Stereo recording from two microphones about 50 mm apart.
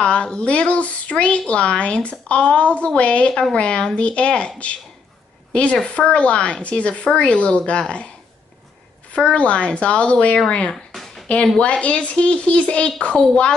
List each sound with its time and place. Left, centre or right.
0.0 s a woman's voice: left
9.1 s speech: left
10.7 s a sound: centre
11.6 s speech: left